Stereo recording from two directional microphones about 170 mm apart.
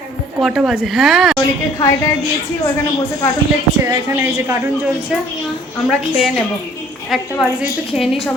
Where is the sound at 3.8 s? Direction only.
20° right (ahead or behind).